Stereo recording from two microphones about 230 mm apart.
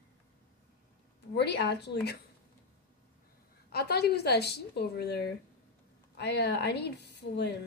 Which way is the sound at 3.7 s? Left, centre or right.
Left.